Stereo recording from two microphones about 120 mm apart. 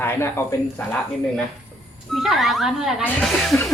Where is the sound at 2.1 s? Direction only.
Centre (ahead or behind).